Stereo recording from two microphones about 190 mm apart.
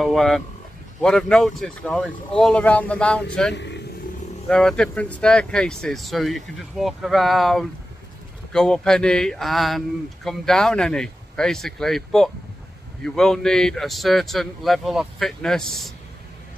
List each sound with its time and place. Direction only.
0.0 s speech: centre (ahead or behind)
3.5 s vehicle: 65° left (ahead or behind)
4.5 s speech: 5° left (ahead or behind)